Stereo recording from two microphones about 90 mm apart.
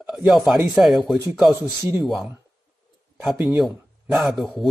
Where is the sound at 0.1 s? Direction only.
5° right (ahead or behind).